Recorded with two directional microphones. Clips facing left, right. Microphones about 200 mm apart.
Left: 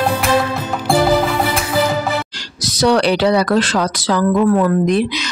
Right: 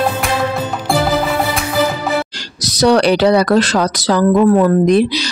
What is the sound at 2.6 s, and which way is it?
A woman's voice, 40° right (ahead or behind).